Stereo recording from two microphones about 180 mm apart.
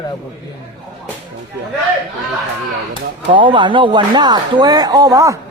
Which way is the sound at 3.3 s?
25° right (ahead or behind).